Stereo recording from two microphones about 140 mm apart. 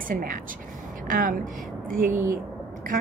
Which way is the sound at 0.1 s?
75° right (ahead or behind).